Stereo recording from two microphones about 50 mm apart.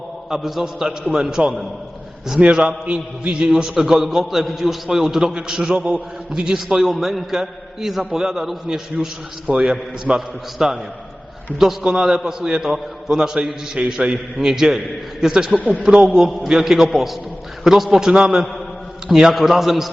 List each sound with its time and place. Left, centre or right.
0.3 s a man's voice: centre; by 9.6 s right
10.2 s a man's voice: centre
11.8 s a man's voice: centre
16.0 s a man's voice: centre
18.1 s a man's voice: centre